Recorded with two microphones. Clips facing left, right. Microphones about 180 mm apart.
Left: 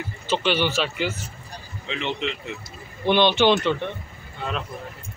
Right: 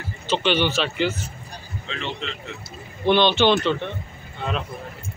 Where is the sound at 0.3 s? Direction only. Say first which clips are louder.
Right 1 dB; 10° left (ahead or behind).